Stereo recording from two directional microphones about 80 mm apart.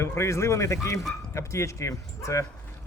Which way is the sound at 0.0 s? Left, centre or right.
Left.